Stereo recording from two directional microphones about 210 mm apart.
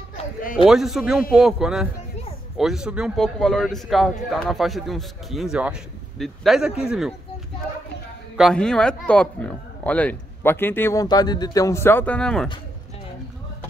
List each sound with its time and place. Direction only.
0.7 s a man's voice: centre (ahead or behind)
8.4 s speech: centre (ahead or behind)